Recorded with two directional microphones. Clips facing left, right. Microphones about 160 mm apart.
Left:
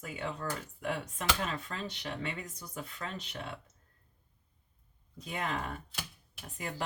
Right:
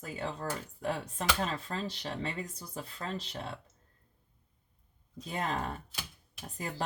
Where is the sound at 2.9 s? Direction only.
30° right (ahead or behind).